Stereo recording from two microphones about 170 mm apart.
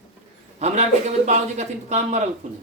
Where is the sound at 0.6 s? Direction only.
40° right (ahead or behind).